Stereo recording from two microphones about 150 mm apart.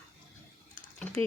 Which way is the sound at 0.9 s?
10° left (ahead or behind).